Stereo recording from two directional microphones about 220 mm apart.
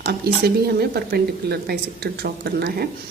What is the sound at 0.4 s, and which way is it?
A woman's voice, 45° right (ahead or behind).